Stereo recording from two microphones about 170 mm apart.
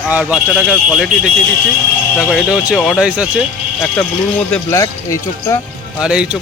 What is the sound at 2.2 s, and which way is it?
Speech, 5° right (ahead or behind).